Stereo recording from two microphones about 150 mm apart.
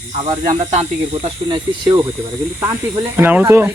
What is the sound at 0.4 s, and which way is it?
Speech, 50° right (ahead or behind).